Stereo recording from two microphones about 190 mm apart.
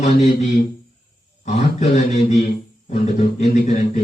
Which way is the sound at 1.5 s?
35° left (ahead or behind).